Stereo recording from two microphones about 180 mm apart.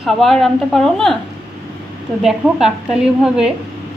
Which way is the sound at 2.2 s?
5° right (ahead or behind).